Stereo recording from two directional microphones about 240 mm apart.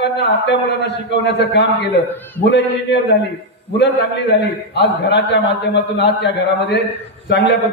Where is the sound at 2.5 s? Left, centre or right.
Left.